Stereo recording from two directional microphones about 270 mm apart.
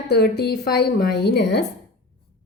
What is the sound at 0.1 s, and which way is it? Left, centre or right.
A woman's voice, left.